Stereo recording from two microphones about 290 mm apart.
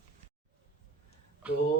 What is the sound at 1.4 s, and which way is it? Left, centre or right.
Speech, centre.